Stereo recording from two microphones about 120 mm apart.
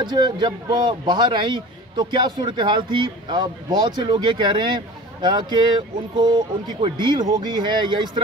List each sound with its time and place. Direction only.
0.0 s speech: 35° right (ahead or behind)